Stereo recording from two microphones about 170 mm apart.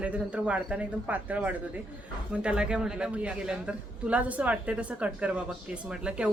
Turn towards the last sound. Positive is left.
turn(degrees=-5)  # may be behind; listen again after turning